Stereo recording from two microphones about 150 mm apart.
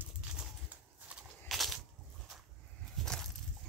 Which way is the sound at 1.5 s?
Centre (ahead or behind).